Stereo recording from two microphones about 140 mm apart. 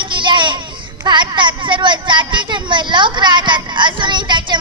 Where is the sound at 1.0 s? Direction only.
30° right (ahead or behind).